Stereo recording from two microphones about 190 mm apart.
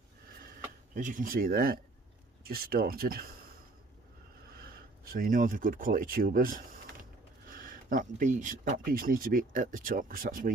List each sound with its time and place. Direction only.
0.9 s speech: 45° right (ahead or behind)
5.0 s speech: 50° right (ahead or behind)